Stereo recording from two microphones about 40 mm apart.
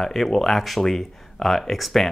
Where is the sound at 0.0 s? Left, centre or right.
Centre.